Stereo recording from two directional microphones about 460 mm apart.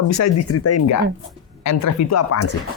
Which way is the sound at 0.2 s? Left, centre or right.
Left.